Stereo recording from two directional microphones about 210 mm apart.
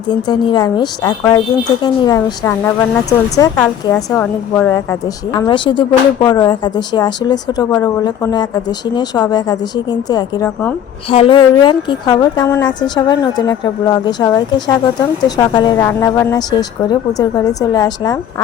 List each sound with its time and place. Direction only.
0.1 s a woman's voice: 20° left (ahead or behind)
11.1 s a woman's voice: 25° left (ahead or behind)